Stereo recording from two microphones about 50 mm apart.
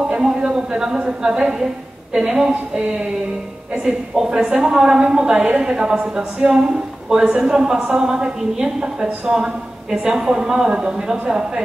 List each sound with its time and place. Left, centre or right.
0.1 s a woman's voice: centre